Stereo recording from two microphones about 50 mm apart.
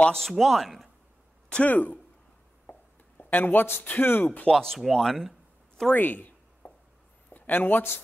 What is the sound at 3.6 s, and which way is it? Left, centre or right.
Speech, left.